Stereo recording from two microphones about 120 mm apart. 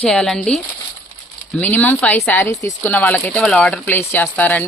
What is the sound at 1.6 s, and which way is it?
Speech, 15° left (ahead or behind).